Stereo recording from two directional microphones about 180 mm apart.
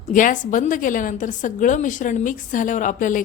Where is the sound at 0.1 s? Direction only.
45° left (ahead or behind).